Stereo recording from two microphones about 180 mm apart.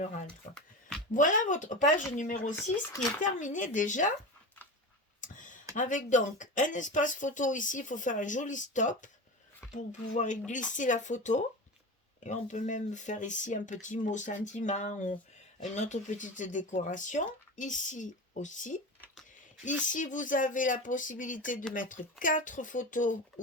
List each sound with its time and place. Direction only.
1.1 s speech: 45° left (ahead or behind)
5.2 s a sound: 45° left (ahead or behind)
5.7 s speech: 45° left (ahead or behind)
19.9 s speech: 45° left (ahead or behind)